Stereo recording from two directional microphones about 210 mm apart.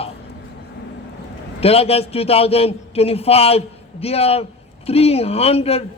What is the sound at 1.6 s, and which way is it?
A man's voice, 30° left (ahead or behind).